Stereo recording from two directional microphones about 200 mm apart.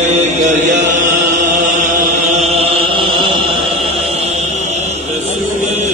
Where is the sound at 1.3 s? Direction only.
35° right (ahead or behind).